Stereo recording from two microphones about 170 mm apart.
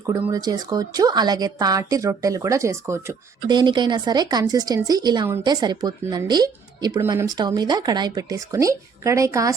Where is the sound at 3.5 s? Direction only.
25° right (ahead or behind).